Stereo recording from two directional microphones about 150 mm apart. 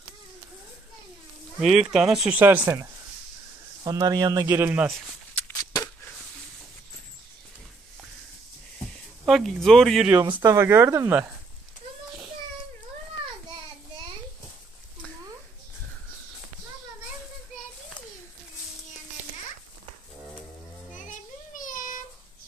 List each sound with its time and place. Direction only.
1.6 s speech: 5° right (ahead or behind)
3.8 s speech: 25° right (ahead or behind)
4.5 s speech: 15° right (ahead or behind)
4.8 s a sound: 5° left (ahead or behind)
5.4 s a sound: 25° left (ahead or behind)
9.2 s speech: centre (ahead or behind)
10.4 s speech: 20° right (ahead or behind)
20.9 s child singing: 60° left (ahead or behind)